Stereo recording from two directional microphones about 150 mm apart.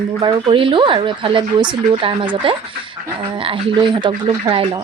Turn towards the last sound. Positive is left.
turn(degrees=-35)  # may be behind; listen again after turning